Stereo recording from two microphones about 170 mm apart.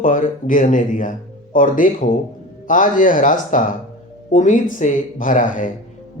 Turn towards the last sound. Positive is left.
turn(degrees=50)  # may be behind; listen again after turning